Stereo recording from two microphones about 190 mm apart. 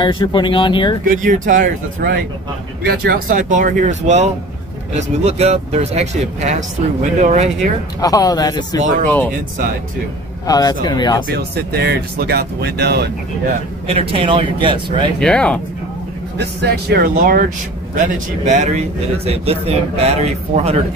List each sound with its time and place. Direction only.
0.0 s speech: 25° left (ahead or behind)
1.0 s speech: 45° right (ahead or behind)
8.0 s speech: 20° left (ahead or behind)
10.4 s speech: 20° left (ahead or behind)
11.3 s speech: 55° right (ahead or behind)
13.8 s speech: 30° right (ahead or behind)
15.1 s speech: 5° left (ahead or behind)
16.3 s speech: 60° right (ahead or behind)
18.4 s speech: 40° right (ahead or behind)